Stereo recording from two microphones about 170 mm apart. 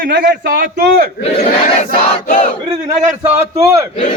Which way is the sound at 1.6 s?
50° left (ahead or behind).